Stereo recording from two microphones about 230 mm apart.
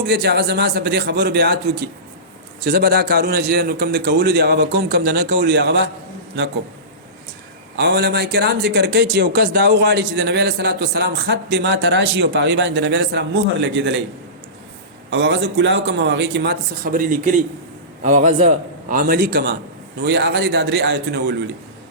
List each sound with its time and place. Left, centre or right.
0.1 s speech: right
7.8 s speech: right
15.1 s a man's voice: right